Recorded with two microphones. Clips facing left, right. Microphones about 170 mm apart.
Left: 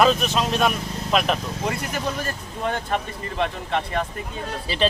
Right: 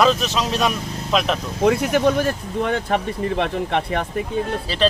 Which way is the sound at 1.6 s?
65° right (ahead or behind).